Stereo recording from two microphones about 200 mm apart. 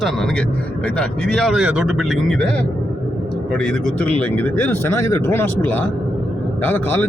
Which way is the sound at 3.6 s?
5° left (ahead or behind).